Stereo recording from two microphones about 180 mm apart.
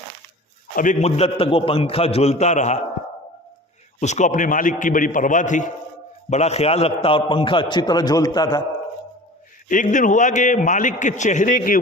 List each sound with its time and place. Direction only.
0.8 s a man's voice: 45° left (ahead or behind)
4.0 s a man's voice: 40° left (ahead or behind); by 8.6 s 20° left (ahead or behind)
9.6 s a man's voice: 45° left (ahead or behind)